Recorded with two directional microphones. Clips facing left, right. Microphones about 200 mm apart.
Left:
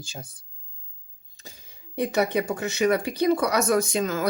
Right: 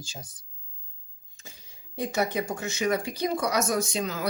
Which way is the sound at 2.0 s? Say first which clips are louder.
Left 4 dB; 65° left (ahead or behind).